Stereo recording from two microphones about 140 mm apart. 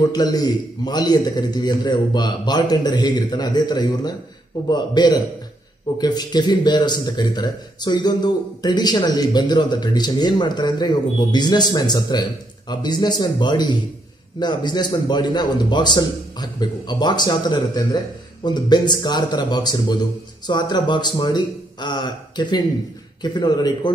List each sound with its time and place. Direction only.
0.0 s a man's voice: 30° left (ahead or behind)